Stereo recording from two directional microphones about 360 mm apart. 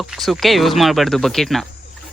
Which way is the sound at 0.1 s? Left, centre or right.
Centre.